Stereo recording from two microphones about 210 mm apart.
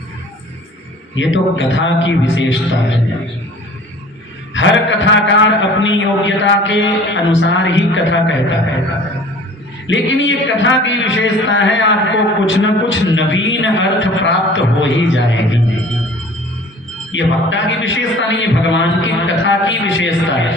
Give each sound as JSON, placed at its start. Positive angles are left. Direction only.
{"t": 1.1, "sound": "a man's voice", "side_deg": 60}
{"t": 4.5, "sound": "a man's voice", "side_deg": 60}
{"t": 9.8, "sound": "a man's voice", "side_deg": 65}
{"t": 17.1, "sound": "a man's voice", "side_deg": 60}